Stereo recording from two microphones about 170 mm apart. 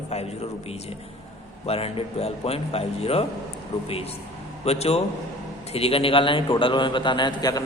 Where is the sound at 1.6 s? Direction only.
35° left (ahead or behind).